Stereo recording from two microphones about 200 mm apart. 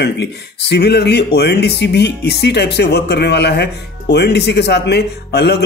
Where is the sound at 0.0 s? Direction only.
55° left (ahead or behind).